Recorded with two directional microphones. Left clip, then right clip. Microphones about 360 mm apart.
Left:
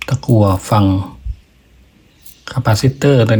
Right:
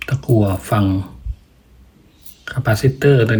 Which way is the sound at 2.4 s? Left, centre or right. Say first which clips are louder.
Left 2 dB; centre.